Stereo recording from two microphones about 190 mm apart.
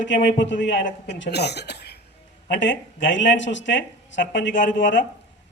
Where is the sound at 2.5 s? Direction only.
70° left (ahead or behind).